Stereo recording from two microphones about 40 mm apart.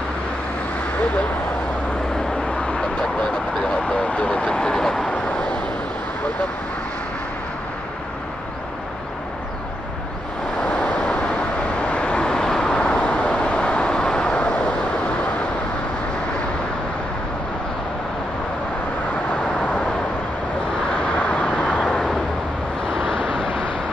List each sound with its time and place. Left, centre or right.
2.6 s vehicle: left
5.1 s a sound: left
10.7 s vehicle: left
12.7 s vehicle: left
21.2 s vehicle: left